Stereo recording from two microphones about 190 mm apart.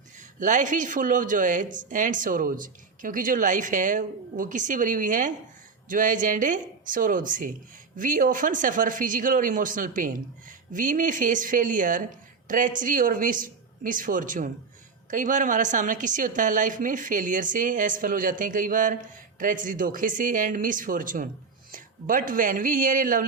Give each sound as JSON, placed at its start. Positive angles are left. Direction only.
{"t": 0.3, "sound": "speech", "side_deg": -40}